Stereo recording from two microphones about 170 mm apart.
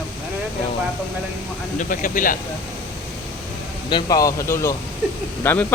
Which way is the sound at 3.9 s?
20° left (ahead or behind).